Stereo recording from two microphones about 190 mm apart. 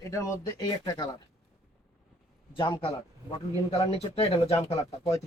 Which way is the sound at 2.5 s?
25° left (ahead or behind).